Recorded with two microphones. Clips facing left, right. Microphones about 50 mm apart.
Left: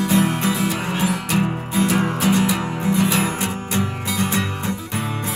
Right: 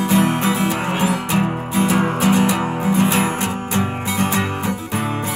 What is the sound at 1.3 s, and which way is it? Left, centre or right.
Music, centre.